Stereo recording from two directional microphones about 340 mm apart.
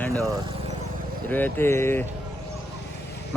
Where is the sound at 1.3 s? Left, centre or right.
Centre.